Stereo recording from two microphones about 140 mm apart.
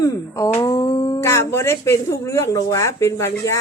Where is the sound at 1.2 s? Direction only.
20° left (ahead or behind).